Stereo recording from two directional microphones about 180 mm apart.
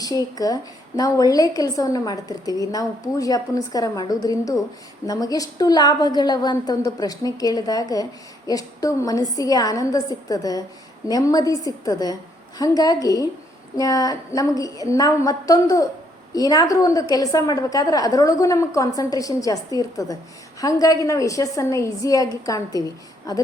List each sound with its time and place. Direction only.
0.0 s a woman's voice: 20° left (ahead or behind)